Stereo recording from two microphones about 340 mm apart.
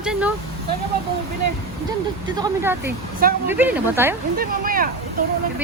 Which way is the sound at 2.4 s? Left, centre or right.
Centre.